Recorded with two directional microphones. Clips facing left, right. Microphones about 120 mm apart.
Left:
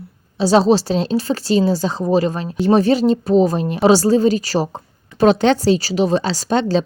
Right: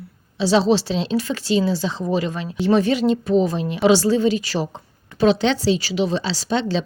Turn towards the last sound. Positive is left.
turn(degrees=45)  # may be behind; listen again after turning